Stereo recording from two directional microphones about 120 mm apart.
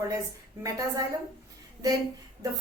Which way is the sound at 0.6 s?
25° right (ahead or behind).